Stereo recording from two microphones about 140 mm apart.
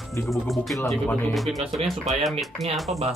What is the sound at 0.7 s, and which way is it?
Speech, 20° left (ahead or behind).